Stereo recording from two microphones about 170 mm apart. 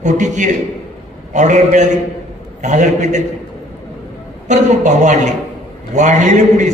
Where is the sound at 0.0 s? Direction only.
45° right (ahead or behind).